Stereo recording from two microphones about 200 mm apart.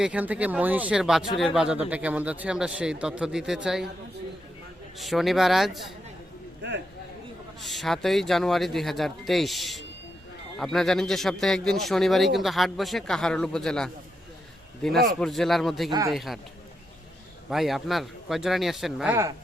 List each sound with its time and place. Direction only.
0.0 s a man's voice: 5° right (ahead or behind)
4.9 s a man's voice: centre (ahead or behind)
7.6 s a man's voice: centre (ahead or behind)
15.9 s speech: 20° right (ahead or behind)
16.1 s a man's voice: centre (ahead or behind)
17.5 s a man's voice: centre (ahead or behind)